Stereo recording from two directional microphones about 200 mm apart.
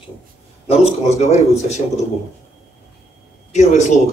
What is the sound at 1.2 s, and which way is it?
Speech, 35° left (ahead or behind).